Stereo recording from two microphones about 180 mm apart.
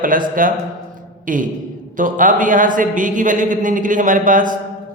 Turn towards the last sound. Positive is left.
turn(degrees=-45)  # may be behind; listen again after turning